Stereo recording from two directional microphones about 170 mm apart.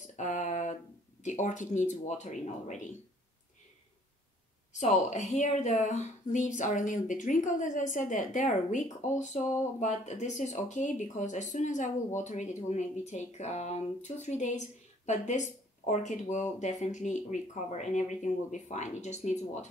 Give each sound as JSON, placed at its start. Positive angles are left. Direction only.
{"t": 0.0, "sound": "a sound", "side_deg": 45}
{"t": 1.2, "sound": "speech", "side_deg": 45}
{"t": 4.7, "sound": "speech", "side_deg": 45}